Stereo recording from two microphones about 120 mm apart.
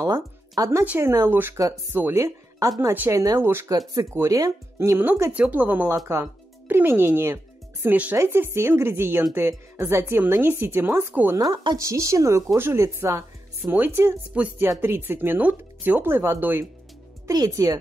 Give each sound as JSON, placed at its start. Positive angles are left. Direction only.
{"t": 0.0, "sound": "a woman's voice", "side_deg": -25}
{"t": 11.3, "sound": "a woman's voice", "side_deg": -35}